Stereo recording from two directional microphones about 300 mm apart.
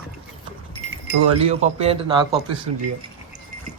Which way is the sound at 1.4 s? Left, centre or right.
Centre.